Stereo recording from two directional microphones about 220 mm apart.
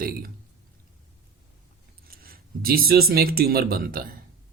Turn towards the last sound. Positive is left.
turn(degrees=-40)  # may be behind; listen again after turning